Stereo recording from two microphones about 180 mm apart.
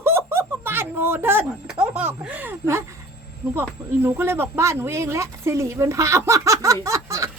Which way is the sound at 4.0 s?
10° right (ahead or behind).